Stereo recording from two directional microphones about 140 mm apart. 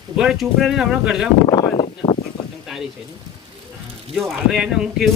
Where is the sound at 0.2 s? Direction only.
Centre (ahead or behind).